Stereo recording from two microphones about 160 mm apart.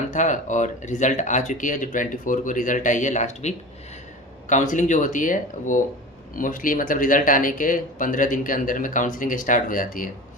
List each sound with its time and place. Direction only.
0.1 s speech: 50° left (ahead or behind)